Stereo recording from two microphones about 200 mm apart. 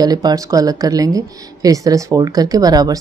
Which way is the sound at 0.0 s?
20° right (ahead or behind).